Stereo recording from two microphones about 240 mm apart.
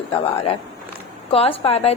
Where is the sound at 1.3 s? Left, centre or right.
Left.